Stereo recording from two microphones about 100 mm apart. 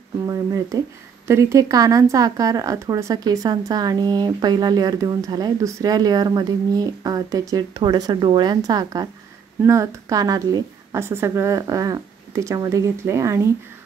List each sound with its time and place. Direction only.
0.3 s speech: 35° right (ahead or behind)